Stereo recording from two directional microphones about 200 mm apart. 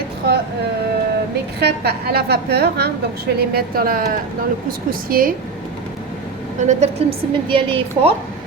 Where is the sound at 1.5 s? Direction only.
55° right (ahead or behind).